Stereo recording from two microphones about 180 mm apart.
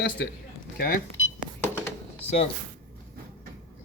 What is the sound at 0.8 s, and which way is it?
Speech, 55° left (ahead or behind).